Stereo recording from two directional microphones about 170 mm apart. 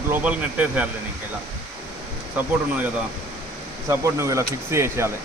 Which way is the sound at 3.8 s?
15° right (ahead or behind).